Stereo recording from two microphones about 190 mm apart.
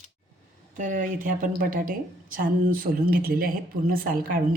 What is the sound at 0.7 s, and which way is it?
A woman's voice, 45° right (ahead or behind).